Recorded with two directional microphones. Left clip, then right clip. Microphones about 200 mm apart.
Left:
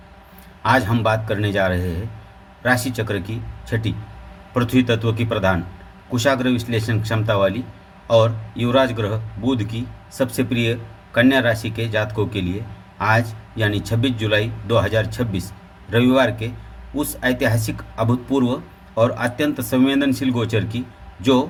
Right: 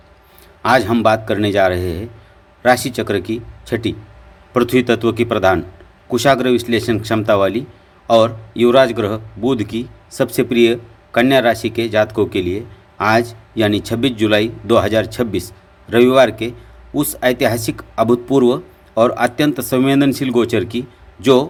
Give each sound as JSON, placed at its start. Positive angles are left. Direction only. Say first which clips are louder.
{"t": 0.6, "sound": "a man's voice", "louder": "right 5 dB", "side_deg": -55}